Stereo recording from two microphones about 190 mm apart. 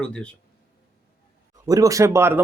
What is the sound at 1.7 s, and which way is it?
Speech, 15° right (ahead or behind).